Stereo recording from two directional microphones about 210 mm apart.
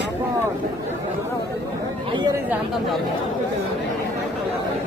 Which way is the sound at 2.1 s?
20° right (ahead or behind).